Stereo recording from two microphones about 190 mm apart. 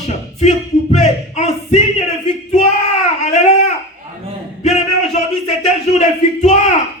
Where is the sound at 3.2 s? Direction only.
35° left (ahead or behind).